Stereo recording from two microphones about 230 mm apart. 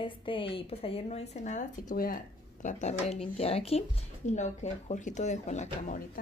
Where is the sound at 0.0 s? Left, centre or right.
Left.